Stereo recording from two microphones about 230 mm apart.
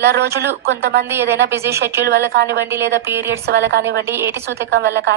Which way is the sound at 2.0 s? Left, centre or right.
Right.